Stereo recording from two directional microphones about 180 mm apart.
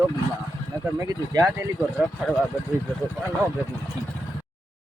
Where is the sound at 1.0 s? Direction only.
20° right (ahead or behind).